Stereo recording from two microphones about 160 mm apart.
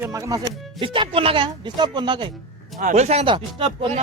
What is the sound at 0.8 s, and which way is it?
Speech, 35° right (ahead or behind).